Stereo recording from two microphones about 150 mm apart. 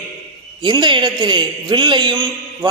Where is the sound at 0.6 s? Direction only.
30° right (ahead or behind).